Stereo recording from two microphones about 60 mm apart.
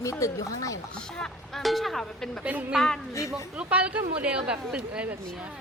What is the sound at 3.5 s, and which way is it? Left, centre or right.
A woman's voice, right.